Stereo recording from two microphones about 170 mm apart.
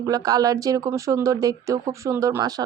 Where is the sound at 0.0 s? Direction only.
20° right (ahead or behind).